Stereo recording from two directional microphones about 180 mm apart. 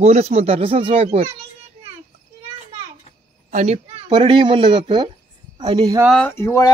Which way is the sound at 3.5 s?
35° right (ahead or behind).